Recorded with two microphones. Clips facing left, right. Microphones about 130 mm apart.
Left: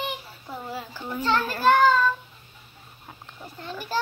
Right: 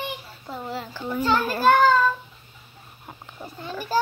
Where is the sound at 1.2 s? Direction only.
10° right (ahead or behind).